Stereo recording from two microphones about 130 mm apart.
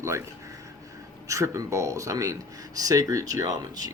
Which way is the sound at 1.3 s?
25° right (ahead or behind).